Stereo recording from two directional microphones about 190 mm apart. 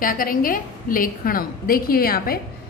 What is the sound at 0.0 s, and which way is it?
A woman's voice, 45° left (ahead or behind).